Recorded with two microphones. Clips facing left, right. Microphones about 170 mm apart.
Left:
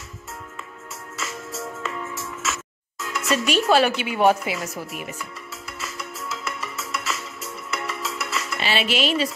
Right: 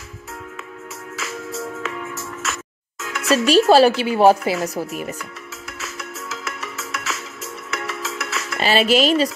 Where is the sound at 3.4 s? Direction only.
35° right (ahead or behind).